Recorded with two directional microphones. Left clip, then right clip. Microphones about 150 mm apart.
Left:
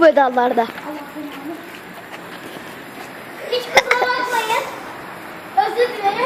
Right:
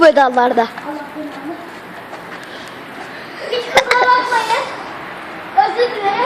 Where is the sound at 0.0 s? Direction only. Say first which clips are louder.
Right 3 dB; 15° right (ahead or behind).